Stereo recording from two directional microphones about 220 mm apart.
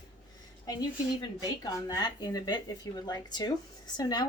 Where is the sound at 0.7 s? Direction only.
15° left (ahead or behind).